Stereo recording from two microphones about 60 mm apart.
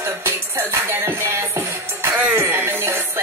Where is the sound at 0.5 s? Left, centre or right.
Right.